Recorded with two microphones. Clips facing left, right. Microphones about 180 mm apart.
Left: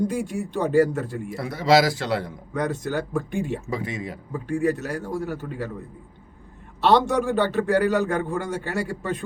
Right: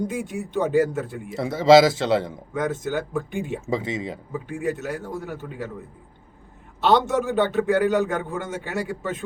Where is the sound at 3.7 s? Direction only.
25° right (ahead or behind).